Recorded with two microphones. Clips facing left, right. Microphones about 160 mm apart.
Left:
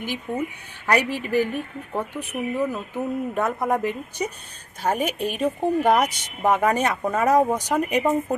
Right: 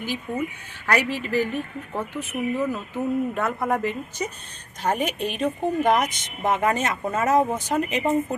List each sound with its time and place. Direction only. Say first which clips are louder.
0.0 s a woman's voice: even; 15° left (ahead or behind)